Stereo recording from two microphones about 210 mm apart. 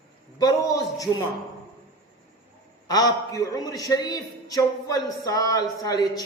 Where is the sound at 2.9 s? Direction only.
20° left (ahead or behind).